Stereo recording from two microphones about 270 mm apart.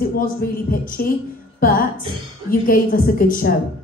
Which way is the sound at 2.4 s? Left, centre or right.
Left.